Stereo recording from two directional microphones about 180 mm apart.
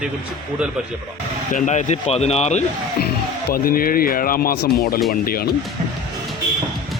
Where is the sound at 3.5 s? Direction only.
55° left (ahead or behind).